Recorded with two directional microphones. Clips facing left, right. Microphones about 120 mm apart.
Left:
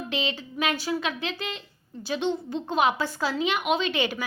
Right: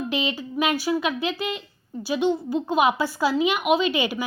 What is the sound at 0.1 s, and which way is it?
A woman's voice, 15° right (ahead or behind).